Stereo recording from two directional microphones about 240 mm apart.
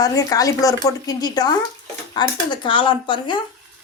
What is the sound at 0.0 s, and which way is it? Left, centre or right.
A woman's voice, centre.